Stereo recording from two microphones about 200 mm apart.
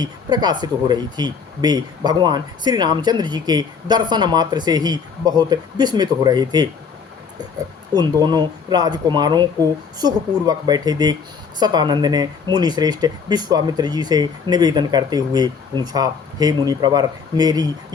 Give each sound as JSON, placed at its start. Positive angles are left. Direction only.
{"t": 0.0, "sound": "speech", "side_deg": -20}
{"t": 7.9, "sound": "speech", "side_deg": -20}